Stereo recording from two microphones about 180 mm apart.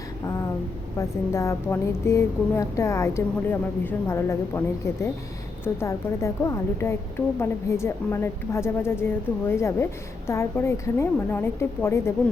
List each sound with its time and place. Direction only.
0.9 s a woman's voice: 15° left (ahead or behind)
5.6 s a woman's voice: 15° left (ahead or behind)